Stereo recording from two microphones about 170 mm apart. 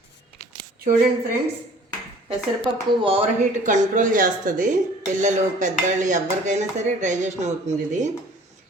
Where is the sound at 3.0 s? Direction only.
35° right (ahead or behind).